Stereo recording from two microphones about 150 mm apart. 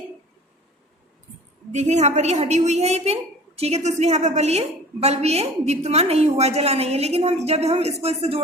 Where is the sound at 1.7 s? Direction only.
50° right (ahead or behind).